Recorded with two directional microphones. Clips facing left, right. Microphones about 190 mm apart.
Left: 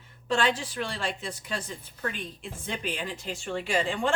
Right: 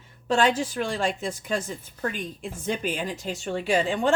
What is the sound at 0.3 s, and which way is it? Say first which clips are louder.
A woman's voice: right 4 dB; 45° right (ahead or behind).